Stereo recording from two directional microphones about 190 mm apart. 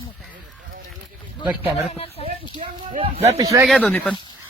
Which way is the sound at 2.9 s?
30° right (ahead or behind).